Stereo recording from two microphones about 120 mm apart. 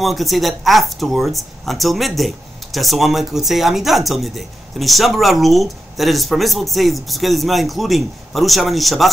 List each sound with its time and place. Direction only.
0.0 s speech: centre (ahead or behind)